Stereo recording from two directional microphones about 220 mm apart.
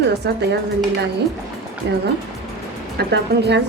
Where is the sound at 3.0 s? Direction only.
50° right (ahead or behind).